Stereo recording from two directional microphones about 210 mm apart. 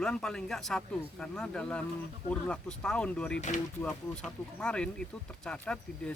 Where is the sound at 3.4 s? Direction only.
35° left (ahead or behind).